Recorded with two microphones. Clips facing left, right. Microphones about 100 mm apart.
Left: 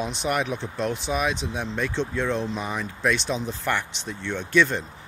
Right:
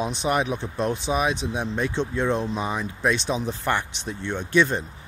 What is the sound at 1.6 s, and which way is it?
Speech, 15° right (ahead or behind).